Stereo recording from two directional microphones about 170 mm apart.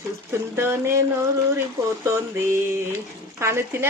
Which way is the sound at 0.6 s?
15° right (ahead or behind).